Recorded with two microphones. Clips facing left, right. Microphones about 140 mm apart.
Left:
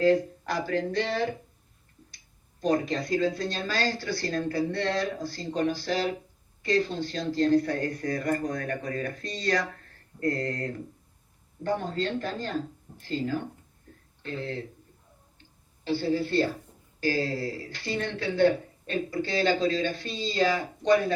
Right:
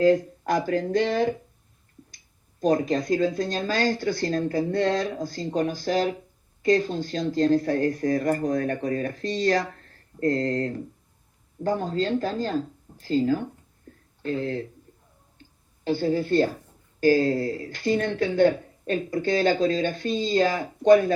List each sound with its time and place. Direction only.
0.0 s speech: 45° right (ahead or behind); by 10.8 s 30° right (ahead or behind)
11.6 s speech: 40° right (ahead or behind)
15.8 s speech: 45° right (ahead or behind)